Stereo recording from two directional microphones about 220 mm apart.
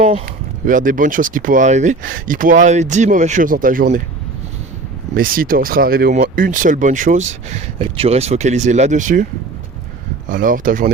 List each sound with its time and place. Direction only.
0.6 s speech: 35° right (ahead or behind)
5.1 s speech: 40° right (ahead or behind)
10.2 s speech: 40° right (ahead or behind)